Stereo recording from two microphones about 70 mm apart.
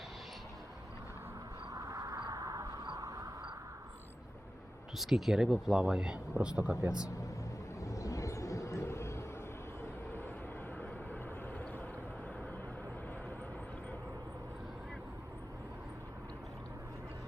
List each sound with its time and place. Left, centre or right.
1.7 s vehicle: right
2.3 s a sound: right
2.8 s vehicle: right
4.9 s speech: centre
7.8 s vehicle: left
10.8 s vehicle: left